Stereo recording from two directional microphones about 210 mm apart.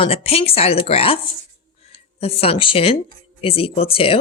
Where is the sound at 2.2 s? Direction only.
30° left (ahead or behind).